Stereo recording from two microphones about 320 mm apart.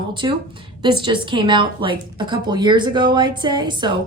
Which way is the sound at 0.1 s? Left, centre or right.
Centre.